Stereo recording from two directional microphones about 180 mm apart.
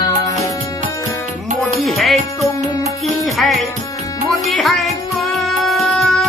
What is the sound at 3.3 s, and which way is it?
Music, centre (ahead or behind).